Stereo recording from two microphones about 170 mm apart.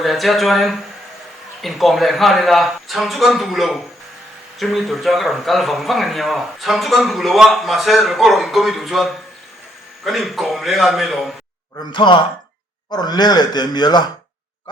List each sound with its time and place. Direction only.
0.0 s speech: centre (ahead or behind)
11.9 s speech: 30° left (ahead or behind)